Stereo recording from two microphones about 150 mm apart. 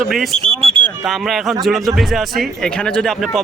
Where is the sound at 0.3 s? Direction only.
40° right (ahead or behind).